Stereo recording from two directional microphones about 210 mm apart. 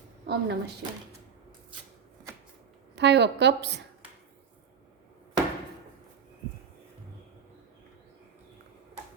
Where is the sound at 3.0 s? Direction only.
55° right (ahead or behind).